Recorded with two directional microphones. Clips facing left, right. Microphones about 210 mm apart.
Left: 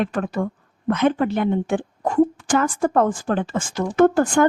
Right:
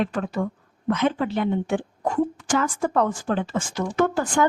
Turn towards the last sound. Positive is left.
turn(degrees=55)  # may be behind; listen again after turning